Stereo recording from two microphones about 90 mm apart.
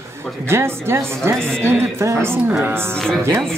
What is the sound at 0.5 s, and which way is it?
A woman's voice, 30° right (ahead or behind).